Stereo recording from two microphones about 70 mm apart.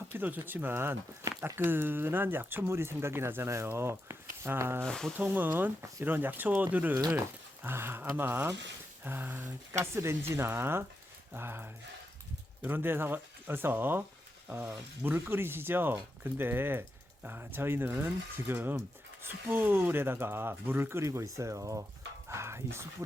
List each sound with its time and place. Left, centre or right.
0.1 s speech: right
4.9 s speech: centre
5.1 s speech: right
9.7 s speech: right